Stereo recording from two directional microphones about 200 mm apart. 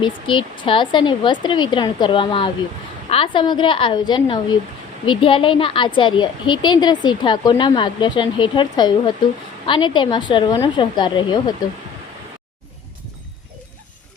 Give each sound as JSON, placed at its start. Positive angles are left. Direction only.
{"t": 0.0, "sound": "a woman's voice", "side_deg": 25}